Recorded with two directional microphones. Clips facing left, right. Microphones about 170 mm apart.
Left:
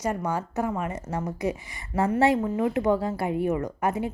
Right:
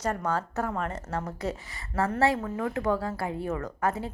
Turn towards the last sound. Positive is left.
turn(degrees=15)  # may be behind; listen again after turning